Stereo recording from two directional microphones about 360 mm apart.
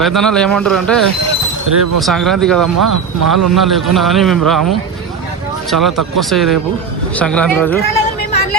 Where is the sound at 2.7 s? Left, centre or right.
Right.